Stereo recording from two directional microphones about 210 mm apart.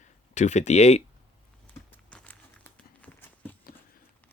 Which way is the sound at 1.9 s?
5° left (ahead or behind).